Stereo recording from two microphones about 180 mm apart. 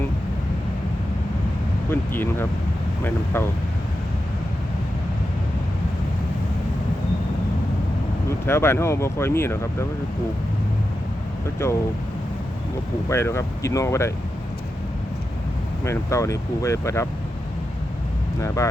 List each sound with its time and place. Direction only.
1.9 s speech: 10° left (ahead or behind)
8.4 s speech: 15° left (ahead or behind)
11.6 s speech: 15° left (ahead or behind)
13.1 s speech: 15° left (ahead or behind)
15.8 s speech: 15° left (ahead or behind)
18.3 s speech: 15° left (ahead or behind)